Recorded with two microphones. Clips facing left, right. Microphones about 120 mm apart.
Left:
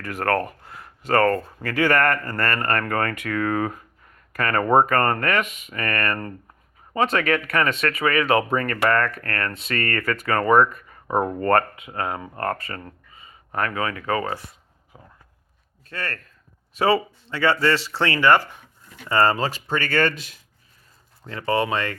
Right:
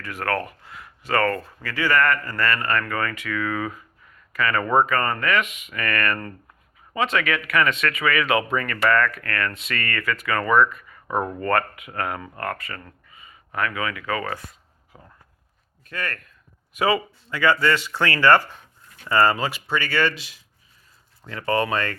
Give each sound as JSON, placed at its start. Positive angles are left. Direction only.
{"t": 0.0, "sound": "speech", "side_deg": 45}
{"t": 1.6, "sound": "speech", "side_deg": 55}
{"t": 12.4, "sound": "speech", "side_deg": 35}
{"t": 14.9, "sound": "speech", "side_deg": 10}
{"t": 15.9, "sound": "speech", "side_deg": 30}
{"t": 19.0, "sound": "speech", "side_deg": 25}
{"t": 21.2, "sound": "speech", "side_deg": 30}